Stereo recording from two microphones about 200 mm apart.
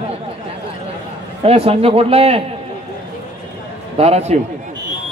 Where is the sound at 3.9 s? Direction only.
30° right (ahead or behind).